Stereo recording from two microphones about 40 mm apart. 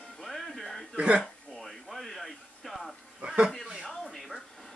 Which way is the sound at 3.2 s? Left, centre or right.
Right.